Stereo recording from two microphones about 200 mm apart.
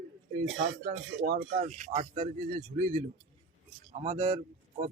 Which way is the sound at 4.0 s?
30° right (ahead or behind).